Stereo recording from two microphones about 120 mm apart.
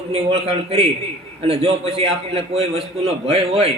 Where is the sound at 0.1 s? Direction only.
60° right (ahead or behind).